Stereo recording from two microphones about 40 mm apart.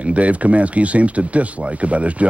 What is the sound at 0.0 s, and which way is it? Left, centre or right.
Speech, right.